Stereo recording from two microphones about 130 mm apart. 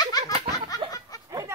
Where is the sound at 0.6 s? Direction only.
25° left (ahead or behind).